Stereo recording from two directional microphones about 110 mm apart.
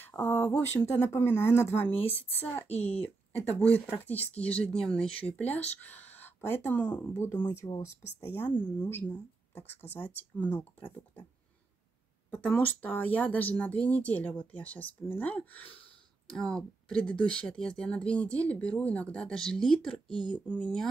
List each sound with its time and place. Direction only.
0.0 s speech: 20° left (ahead or behind)
1.9 s a woman's voice: 60° left (ahead or behind)
2.3 s speech: 15° left (ahead or behind)
8.2 s speech: 15° left (ahead or behind)
12.3 s speech: 15° left (ahead or behind)